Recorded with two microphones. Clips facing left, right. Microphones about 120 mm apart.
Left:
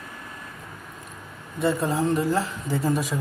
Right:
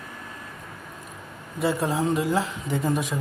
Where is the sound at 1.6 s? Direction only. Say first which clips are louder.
Left 1 dB; centre (ahead or behind).